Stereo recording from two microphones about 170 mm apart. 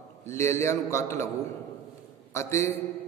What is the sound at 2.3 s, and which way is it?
Speech, 15° left (ahead or behind).